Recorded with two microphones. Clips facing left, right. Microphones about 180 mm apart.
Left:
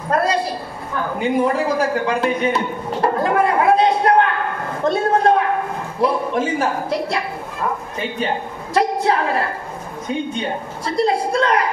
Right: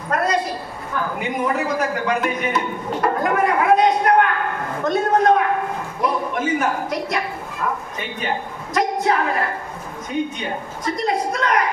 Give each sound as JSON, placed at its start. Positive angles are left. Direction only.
{"t": 0.1, "sound": "a woman's voice", "side_deg": 30}
{"t": 8.7, "sound": "a woman's voice", "side_deg": 30}
{"t": 10.9, "sound": "a man's voice", "side_deg": 30}